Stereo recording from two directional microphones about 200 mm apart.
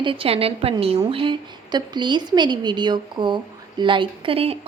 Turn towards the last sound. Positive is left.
turn(degrees=-30)  # may be behind; listen again after turning